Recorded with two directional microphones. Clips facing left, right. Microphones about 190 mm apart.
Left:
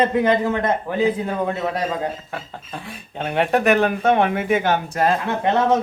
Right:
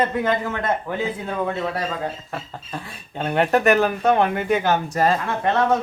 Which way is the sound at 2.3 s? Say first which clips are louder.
Even; centre (ahead or behind).